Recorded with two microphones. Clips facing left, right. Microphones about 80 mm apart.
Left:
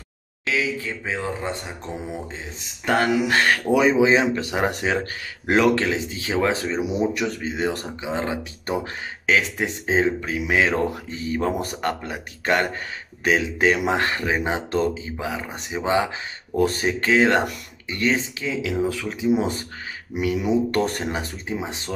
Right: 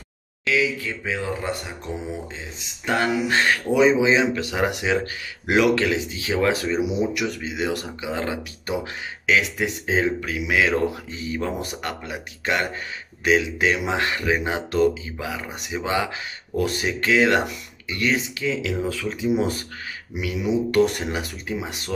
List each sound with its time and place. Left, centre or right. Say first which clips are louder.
0.5 s speech: right 2 dB; left
2.6 s speech: left 2 dB; left
9.2 s speech: even; left
18.4 s speech: left 1 dB; left
20.2 s speech: left 3 dB; left